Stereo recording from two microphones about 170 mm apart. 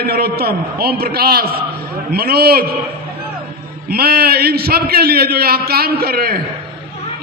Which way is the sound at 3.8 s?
65° right (ahead or behind).